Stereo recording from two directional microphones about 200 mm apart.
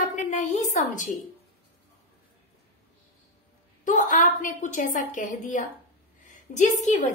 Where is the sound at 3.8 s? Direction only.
40° left (ahead or behind).